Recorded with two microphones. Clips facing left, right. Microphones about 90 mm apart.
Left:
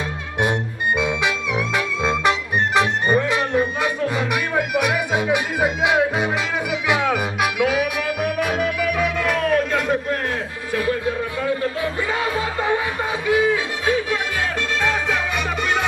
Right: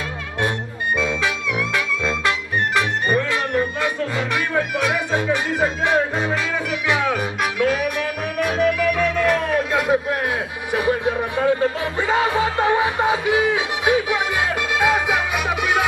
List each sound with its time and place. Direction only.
0.4 s music: 20° left (ahead or behind); by 10.1 s 5° right (ahead or behind)
10.7 s music: 20° right (ahead or behind)